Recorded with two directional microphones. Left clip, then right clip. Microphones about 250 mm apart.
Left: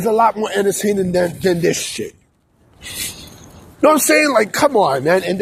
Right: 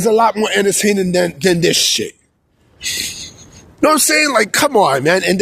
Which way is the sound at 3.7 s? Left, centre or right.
Right.